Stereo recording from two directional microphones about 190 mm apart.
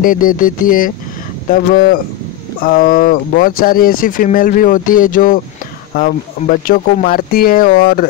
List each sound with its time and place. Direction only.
0.0 s speech: 45° left (ahead or behind)